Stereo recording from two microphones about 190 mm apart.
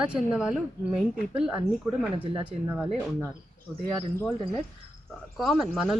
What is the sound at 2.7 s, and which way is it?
Speech, 10° right (ahead or behind).